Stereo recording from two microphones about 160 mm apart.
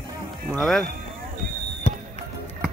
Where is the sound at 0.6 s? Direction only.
Centre (ahead or behind).